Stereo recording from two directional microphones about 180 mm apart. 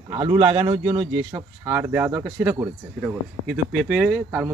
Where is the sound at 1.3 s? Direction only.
15° right (ahead or behind).